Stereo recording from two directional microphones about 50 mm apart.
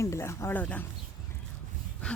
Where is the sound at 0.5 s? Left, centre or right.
Left.